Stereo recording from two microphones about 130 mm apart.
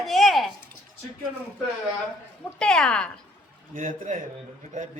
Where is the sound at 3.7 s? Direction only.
85° right.